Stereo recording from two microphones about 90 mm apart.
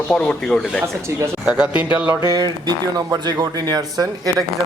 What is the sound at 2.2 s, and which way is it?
Speech, 45° right (ahead or behind).